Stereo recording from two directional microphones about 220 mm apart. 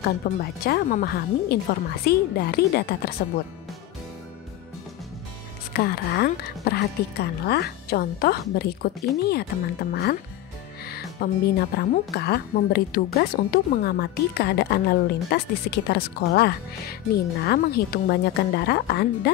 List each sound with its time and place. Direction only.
0.4 s speech: 45° left (ahead or behind)
5.7 s speech: 45° left (ahead or behind)